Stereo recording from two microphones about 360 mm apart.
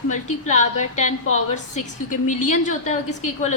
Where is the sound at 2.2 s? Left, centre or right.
Centre.